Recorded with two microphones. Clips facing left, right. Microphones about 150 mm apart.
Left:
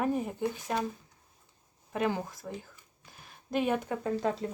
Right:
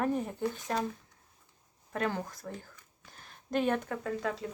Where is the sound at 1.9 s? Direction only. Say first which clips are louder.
Left 2 dB; 10° left (ahead or behind).